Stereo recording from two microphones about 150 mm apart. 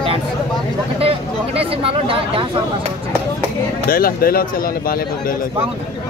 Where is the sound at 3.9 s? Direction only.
80° left.